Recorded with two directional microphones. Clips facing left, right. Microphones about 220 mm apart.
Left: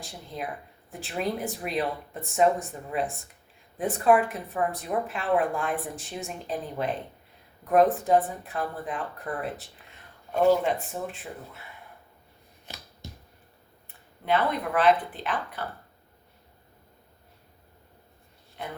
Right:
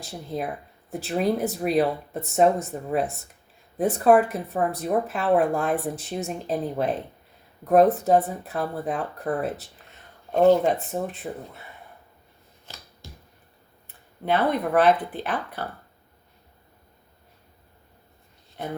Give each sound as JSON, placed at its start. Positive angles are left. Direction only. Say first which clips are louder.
{"t": 0.9, "sound": "speech", "louder": "right 7 dB", "side_deg": -40}
{"t": 13.0, "sound": "finger snapping", "louder": "left 3 dB", "side_deg": 20}
{"t": 14.3, "sound": "speech", "louder": "right 3 dB", "side_deg": -40}